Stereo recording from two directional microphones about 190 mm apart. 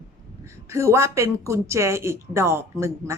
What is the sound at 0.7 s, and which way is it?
A woman's voice, 15° right (ahead or behind).